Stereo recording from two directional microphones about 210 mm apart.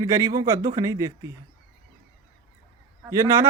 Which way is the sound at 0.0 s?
20° right (ahead or behind).